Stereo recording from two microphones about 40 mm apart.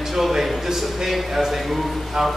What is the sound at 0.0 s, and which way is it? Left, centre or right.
A man's voice, centre.